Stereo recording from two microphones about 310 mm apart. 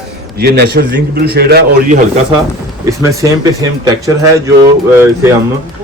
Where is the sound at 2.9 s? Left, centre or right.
Centre.